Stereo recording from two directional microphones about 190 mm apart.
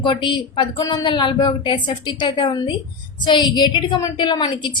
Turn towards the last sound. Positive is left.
turn(degrees=25)  # may be behind; listen again after turning